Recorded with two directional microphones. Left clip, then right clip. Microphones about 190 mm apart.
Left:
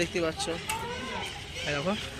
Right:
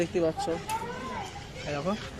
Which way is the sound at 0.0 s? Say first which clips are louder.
Right 2 dB; 50° right (ahead or behind).